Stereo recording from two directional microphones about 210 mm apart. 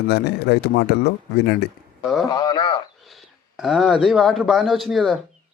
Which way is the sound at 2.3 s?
20° left (ahead or behind).